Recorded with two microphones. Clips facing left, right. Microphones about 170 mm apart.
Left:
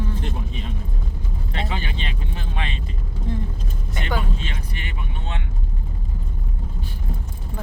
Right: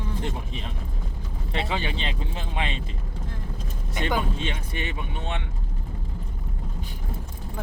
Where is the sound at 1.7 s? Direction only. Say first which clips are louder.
Right 1 dB; 25° right (ahead or behind).